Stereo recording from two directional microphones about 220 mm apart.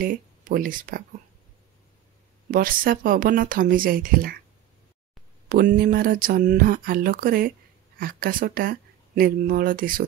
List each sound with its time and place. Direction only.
0.0 s speech: 40° right (ahead or behind)
2.5 s speech: 40° right (ahead or behind)
5.5 s speech: 40° right (ahead or behind)